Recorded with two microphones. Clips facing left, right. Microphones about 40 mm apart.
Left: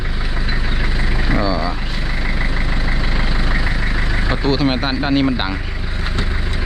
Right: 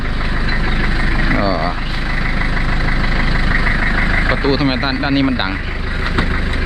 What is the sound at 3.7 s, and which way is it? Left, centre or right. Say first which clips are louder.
Speech: right 6 dB; right.